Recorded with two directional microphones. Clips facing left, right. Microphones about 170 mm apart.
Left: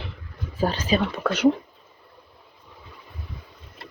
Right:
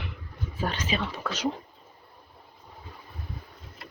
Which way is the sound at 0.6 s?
35° left (ahead or behind).